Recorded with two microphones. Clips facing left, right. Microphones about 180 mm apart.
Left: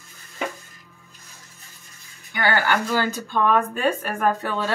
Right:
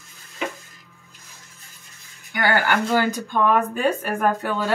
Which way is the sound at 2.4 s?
15° right (ahead or behind).